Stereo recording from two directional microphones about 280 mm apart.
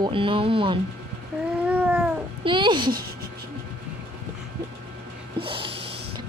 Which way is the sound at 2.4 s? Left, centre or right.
Centre.